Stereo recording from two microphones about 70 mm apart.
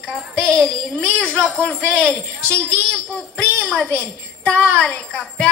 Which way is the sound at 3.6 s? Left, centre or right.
Centre.